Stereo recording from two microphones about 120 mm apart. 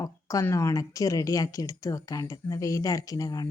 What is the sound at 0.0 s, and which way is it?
Speech, 25° left (ahead or behind).